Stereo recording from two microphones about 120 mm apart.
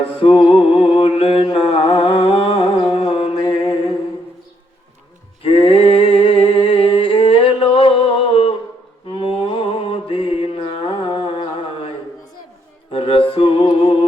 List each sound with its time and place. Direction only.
0.2 s mantra: 45° left (ahead or behind)
5.4 s a sound: 55° left (ahead or behind)
9.0 s mantra: 50° left (ahead or behind)
12.9 s music: 50° left (ahead or behind)